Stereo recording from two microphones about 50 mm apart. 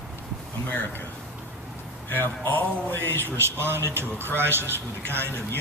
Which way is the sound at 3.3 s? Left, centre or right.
Right.